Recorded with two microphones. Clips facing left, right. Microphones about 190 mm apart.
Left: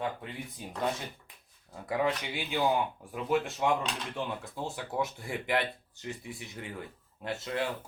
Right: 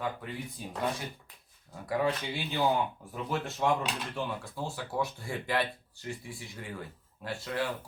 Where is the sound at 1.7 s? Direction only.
20° left (ahead or behind).